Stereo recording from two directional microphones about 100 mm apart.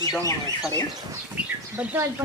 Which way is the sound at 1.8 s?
15° right (ahead or behind).